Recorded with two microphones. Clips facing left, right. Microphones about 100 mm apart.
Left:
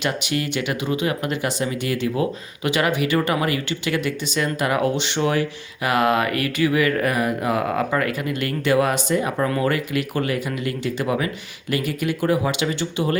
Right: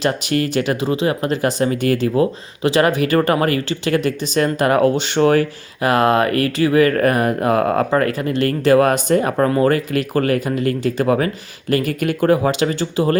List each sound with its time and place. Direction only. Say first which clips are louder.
0.0 s speech: right 5 dB; 40° right (ahead or behind)
9.5 s speech: right 6 dB; 35° right (ahead or behind)